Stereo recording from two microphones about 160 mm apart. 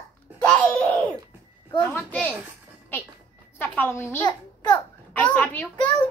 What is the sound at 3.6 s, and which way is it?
A woman's voice, 15° left (ahead or behind).